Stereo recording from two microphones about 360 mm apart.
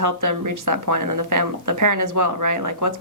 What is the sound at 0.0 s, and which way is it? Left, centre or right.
A woman's voice, right.